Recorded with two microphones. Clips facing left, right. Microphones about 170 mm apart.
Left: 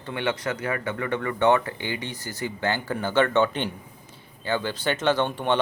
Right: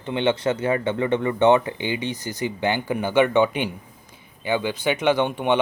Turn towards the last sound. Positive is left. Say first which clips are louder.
# right 3 dB
turn(degrees=-15)  # may be behind; listen again after turning